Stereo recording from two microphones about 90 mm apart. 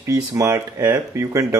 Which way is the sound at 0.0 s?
35° right (ahead or behind).